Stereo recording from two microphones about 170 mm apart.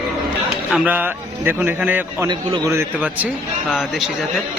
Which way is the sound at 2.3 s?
25° right (ahead or behind).